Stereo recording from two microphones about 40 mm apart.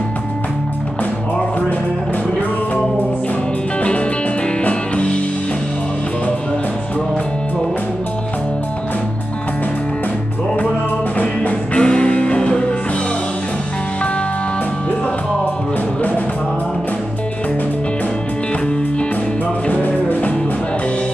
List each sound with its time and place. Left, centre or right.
4.6 s music: left
11.7 s music: left
19.7 s music: left